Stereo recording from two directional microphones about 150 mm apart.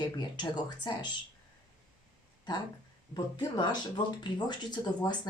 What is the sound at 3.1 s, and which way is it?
Speech, 30° left (ahead or behind).